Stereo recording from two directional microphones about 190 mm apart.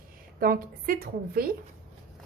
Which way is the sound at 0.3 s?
50° right (ahead or behind).